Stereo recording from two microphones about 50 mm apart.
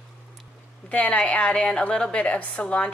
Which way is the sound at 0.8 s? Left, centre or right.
Left.